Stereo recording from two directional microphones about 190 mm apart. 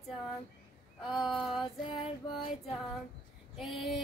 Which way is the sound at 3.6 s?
Centre (ahead or behind).